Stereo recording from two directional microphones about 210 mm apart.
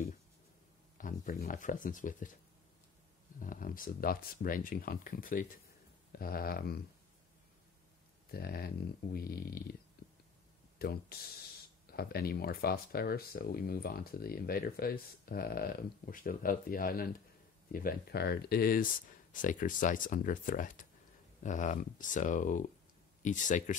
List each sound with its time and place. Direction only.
0.9 s speech: 40° left (ahead or behind)
3.3 s speech: 40° left (ahead or behind)
8.3 s speech: 45° left (ahead or behind)
10.8 s speech: 45° left (ahead or behind)